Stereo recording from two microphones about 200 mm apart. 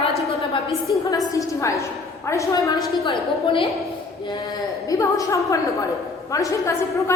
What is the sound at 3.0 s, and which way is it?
Speech, 25° left (ahead or behind).